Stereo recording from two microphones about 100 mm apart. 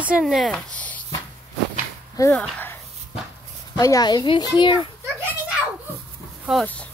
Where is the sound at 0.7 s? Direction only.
15° left (ahead or behind).